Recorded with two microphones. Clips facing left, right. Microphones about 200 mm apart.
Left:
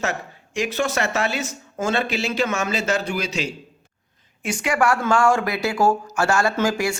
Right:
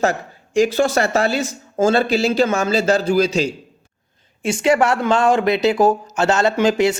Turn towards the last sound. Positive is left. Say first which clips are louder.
# right 6 dB
turn(degrees=-20)  # may be behind; listen again after turning